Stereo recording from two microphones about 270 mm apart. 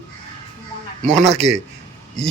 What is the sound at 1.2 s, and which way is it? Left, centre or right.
Speech, right.